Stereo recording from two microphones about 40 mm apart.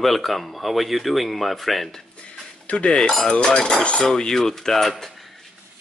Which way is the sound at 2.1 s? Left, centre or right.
Left.